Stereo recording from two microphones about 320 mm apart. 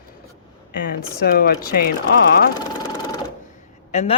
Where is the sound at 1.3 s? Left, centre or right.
Left.